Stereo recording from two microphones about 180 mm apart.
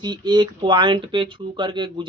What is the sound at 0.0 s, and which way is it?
Speech, 25° right (ahead or behind).